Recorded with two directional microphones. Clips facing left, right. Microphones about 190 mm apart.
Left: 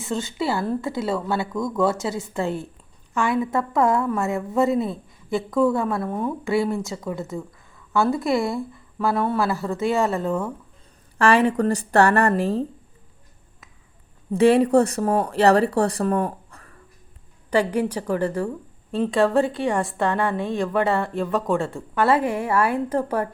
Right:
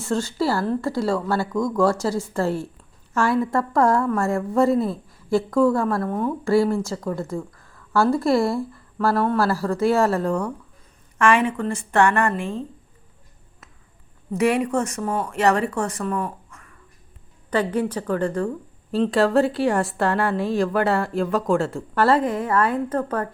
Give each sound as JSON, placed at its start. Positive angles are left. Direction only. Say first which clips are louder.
{"t": 0.1, "sound": "a woman's voice", "louder": "right 3 dB", "side_deg": 0}
{"t": 0.5, "sound": "a woman's voice", "louder": "right 2 dB", "side_deg": 15}
{"t": 1.4, "sound": "a woman's voice", "louder": "right 2 dB", "side_deg": 5}
{"t": 7.3, "sound": "a sound", "louder": "right 2 dB", "side_deg": 20}
{"t": 8.0, "sound": "a woman's voice", "louder": "right 3 dB", "side_deg": 0}
{"t": 11.2, "sound": "speech", "louder": "left 2 dB", "side_deg": 35}
{"t": 14.3, "sound": "speech", "louder": "left 5 dB", "side_deg": 30}
{"t": 17.5, "sound": "a woman's voice", "louder": "left 1 dB", "side_deg": 10}